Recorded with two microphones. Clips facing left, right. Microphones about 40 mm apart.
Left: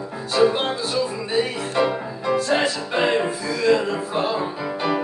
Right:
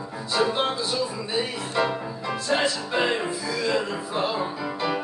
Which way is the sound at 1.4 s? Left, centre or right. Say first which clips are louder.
Left 4 dB; centre.